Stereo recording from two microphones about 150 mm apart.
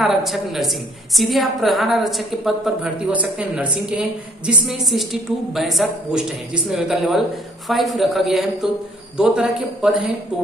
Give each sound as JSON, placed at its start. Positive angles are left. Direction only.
{"t": 0.0, "sound": "a woman's voice", "side_deg": 0}